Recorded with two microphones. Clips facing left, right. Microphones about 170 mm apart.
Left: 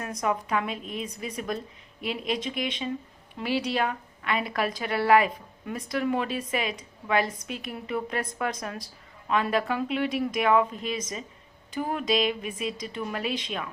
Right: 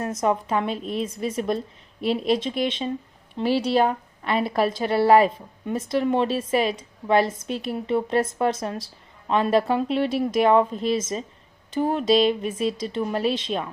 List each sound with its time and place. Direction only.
0.0 s a woman's voice: 30° right (ahead or behind)